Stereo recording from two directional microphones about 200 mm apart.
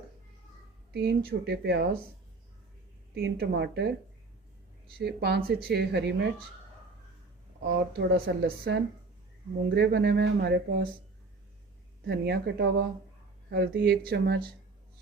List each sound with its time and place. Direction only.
0.9 s speech: 55° right (ahead or behind)
3.2 s speech: 60° right (ahead or behind)
7.6 s speech: 55° right (ahead or behind)
12.0 s speech: 55° right (ahead or behind)